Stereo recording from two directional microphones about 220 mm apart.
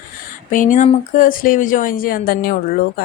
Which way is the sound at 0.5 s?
35° left (ahead or behind).